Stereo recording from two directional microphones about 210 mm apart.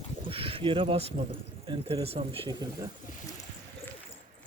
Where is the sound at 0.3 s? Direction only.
25° right (ahead or behind).